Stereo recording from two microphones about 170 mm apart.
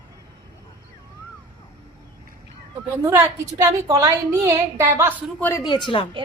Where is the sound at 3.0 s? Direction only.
15° right (ahead or behind).